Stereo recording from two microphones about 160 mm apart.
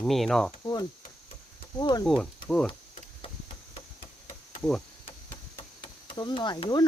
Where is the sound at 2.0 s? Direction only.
Centre (ahead or behind).